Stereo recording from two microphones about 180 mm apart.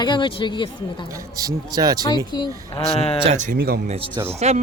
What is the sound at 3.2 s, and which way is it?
Speech, 35° right (ahead or behind).